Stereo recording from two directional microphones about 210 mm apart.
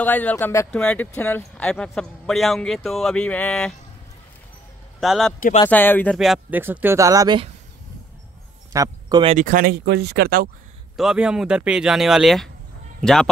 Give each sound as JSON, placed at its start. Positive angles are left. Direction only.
{"t": 0.0, "sound": "speech", "side_deg": 10}
{"t": 5.0, "sound": "speech", "side_deg": 0}
{"t": 8.7, "sound": "speech", "side_deg": -15}
{"t": 9.2, "sound": "speech", "side_deg": -35}
{"t": 11.0, "sound": "speech", "side_deg": -5}